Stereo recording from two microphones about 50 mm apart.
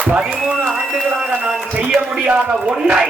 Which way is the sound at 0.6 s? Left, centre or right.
Centre.